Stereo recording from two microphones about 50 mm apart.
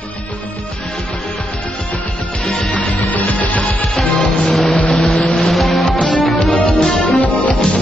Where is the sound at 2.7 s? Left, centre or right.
Left.